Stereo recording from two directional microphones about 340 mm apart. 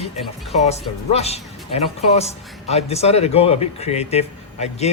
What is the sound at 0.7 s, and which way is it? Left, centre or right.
A woman's voice, centre.